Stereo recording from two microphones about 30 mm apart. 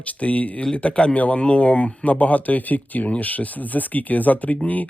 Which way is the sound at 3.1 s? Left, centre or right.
Left.